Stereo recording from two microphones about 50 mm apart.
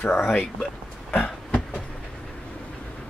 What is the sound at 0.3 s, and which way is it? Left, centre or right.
Speech, centre.